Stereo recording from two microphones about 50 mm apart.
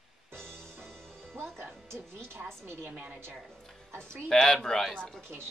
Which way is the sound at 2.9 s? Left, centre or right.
Right.